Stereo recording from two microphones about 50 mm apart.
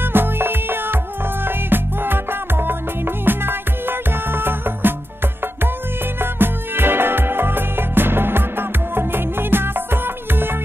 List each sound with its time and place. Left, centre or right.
0.0 s music: right
6.3 s music: right